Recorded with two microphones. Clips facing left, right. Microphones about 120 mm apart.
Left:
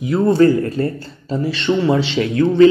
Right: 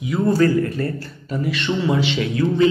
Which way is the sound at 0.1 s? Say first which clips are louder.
Left 4 dB; 30° left (ahead or behind).